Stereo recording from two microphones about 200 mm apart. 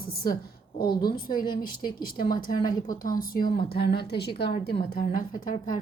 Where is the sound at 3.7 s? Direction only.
55° left (ahead or behind).